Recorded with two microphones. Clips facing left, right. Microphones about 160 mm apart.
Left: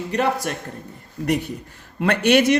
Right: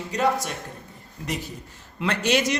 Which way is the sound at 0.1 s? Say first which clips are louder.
Left 2 dB; 60° left (ahead or behind).